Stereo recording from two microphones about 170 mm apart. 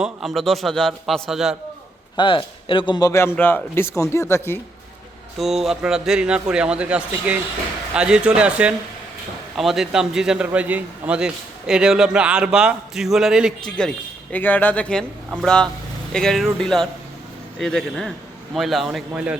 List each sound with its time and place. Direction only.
0.0 s a man's voice: centre (ahead or behind)
2.1 s a man's voice: 30° left (ahead or behind)
5.4 s a man's voice: centre (ahead or behind)